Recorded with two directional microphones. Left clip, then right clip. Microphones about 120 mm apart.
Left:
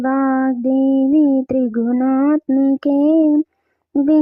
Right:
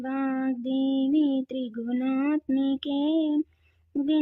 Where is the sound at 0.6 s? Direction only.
90° left.